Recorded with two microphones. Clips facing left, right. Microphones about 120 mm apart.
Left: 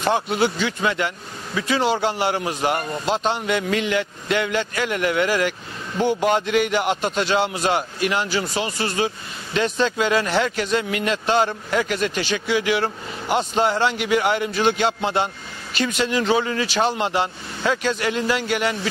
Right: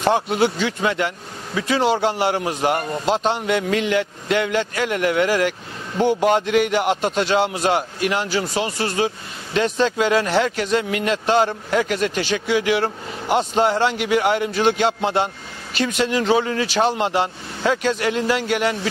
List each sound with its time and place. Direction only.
0.1 s a man's voice: 50° right (ahead or behind)
3.1 s a sound: 55° right (ahead or behind)
3.6 s a man's voice: 50° right (ahead or behind)
6.2 s a sound: 55° right (ahead or behind)
7.2 s a man's voice: 55° right (ahead or behind)
13.8 s a man's voice: 55° right (ahead or behind)
16.6 s a man's voice: 55° right (ahead or behind)